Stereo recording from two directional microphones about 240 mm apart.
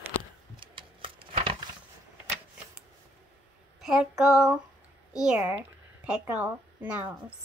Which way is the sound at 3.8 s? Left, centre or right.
Centre.